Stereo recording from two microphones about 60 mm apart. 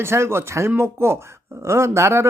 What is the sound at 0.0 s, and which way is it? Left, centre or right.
Speech, right.